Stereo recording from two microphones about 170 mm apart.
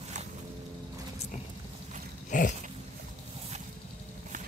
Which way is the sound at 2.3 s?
50° left (ahead or behind).